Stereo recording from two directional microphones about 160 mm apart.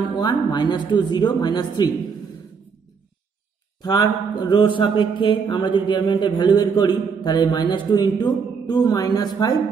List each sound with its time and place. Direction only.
0.1 s a man's voice: 25° left (ahead or behind)
3.8 s a man's voice: 25° left (ahead or behind)